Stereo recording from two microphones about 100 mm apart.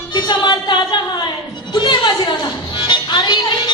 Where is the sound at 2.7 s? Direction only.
45° left (ahead or behind).